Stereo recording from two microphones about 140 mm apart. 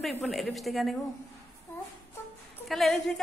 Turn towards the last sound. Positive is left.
turn(degrees=0)  # may be behind; listen again after turning